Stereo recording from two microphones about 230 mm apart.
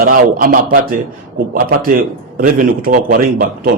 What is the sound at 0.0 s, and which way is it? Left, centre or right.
A man's voice, right.